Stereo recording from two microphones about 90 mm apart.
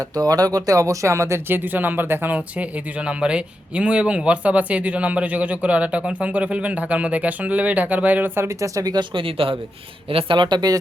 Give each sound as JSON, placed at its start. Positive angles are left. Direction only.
{"t": 0.0, "sound": "speech", "side_deg": -45}
{"t": 8.4, "sound": "speech", "side_deg": -35}
{"t": 9.1, "sound": "speech", "side_deg": -80}